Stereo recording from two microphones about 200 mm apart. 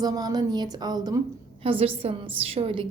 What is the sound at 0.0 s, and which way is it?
A woman's voice, 20° right (ahead or behind).